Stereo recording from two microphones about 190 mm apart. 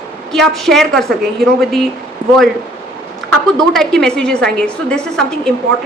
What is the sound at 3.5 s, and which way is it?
A woman's voice, centre (ahead or behind).